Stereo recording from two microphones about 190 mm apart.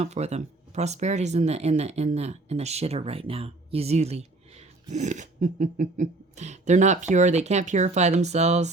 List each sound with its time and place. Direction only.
0.0 s speech: 35° right (ahead or behind)